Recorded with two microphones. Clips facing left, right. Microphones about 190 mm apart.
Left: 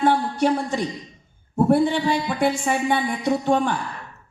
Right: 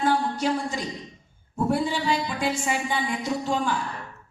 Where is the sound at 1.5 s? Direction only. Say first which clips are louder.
Left 7 dB; 60° left (ahead or behind).